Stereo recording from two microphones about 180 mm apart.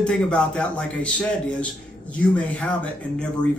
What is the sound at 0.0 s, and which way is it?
Speech, 5° left (ahead or behind).